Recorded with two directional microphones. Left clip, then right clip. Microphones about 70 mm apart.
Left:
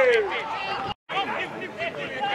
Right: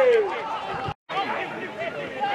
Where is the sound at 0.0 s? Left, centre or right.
Centre.